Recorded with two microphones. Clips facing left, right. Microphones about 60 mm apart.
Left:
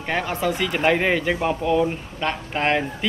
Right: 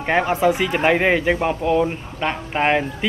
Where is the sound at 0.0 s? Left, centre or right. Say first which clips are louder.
Right 6 dB; right.